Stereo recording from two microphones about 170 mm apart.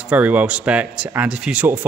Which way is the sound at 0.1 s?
10° right (ahead or behind).